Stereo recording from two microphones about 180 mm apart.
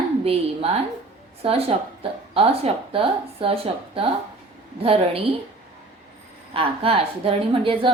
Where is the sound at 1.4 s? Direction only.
35° right (ahead or behind).